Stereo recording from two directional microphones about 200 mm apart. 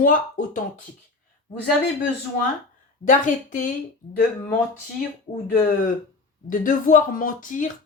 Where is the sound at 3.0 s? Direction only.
40° left (ahead or behind).